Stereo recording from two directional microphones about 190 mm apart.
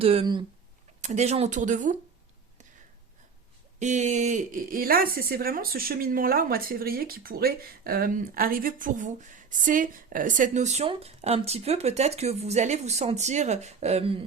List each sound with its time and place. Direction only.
0.0 s speech: 30° right (ahead or behind)
3.8 s speech: 40° right (ahead or behind)